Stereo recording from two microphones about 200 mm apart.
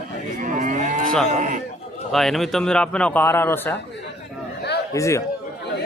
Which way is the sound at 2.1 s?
Centre (ahead or behind).